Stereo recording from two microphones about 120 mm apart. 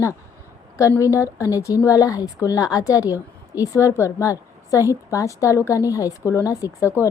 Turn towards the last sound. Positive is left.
turn(degrees=20)  # may be behind; listen again after turning